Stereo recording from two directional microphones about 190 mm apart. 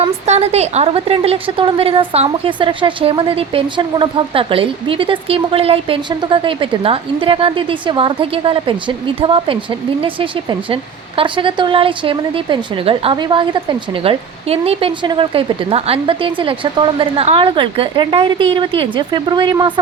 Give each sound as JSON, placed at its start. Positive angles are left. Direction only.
{"t": 0.0, "sound": "a woman's voice", "side_deg": -35}
{"t": 11.2, "sound": "a woman's voice", "side_deg": -25}